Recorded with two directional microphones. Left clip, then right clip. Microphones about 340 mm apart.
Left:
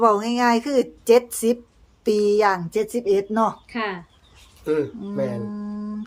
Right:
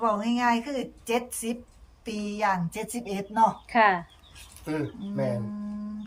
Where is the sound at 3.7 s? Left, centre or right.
Centre.